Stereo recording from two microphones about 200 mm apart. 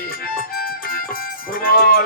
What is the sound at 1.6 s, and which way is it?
Music, 45° left (ahead or behind).